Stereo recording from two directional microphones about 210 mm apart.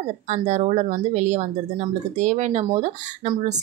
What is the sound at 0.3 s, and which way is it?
Speech, 30° right (ahead or behind).